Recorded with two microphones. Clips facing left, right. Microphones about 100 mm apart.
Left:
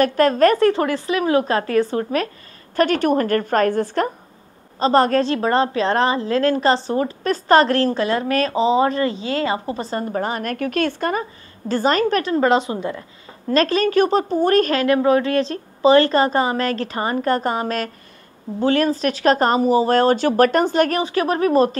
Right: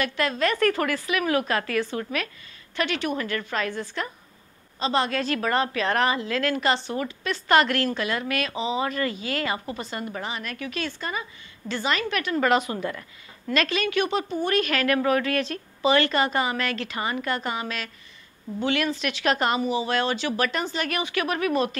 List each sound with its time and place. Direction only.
0.0 s a woman's voice: 45° left (ahead or behind)
0.6 s a woman's voice: 25° left (ahead or behind); by 5.2 s 40° left (ahead or behind)
5.2 s a woman's voice: 30° left (ahead or behind); by 11.2 s 55° left (ahead or behind)
11.7 s speech: 40° left (ahead or behind); by 13.0 s 25° left (ahead or behind)
13.5 s a woman's voice: 35° left (ahead or behind)
14.7 s a woman's voice: 25° left (ahead or behind); by 20.9 s 50° left (ahead or behind)
20.9 s a woman's voice: 35° left (ahead or behind)